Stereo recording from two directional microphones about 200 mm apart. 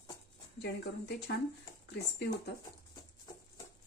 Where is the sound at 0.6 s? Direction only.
60° left (ahead or behind).